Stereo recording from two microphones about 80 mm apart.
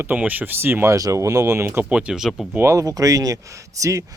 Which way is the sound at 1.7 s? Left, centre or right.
Right.